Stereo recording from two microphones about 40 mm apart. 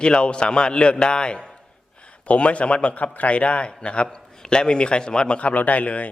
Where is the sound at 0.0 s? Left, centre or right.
Left.